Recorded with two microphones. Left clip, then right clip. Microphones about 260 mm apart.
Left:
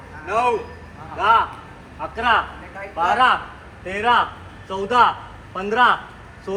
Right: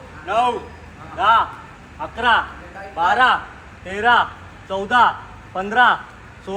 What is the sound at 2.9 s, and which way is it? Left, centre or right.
A man's voice, right.